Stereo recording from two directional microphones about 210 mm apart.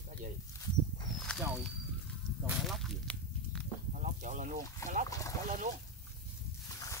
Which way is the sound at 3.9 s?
35° right (ahead or behind).